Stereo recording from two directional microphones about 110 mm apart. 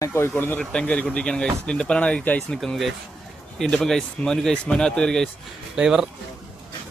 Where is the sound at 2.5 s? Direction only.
Centre (ahead or behind).